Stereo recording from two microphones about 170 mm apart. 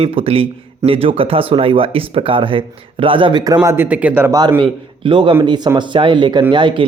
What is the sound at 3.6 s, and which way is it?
Speech, 10° right (ahead or behind).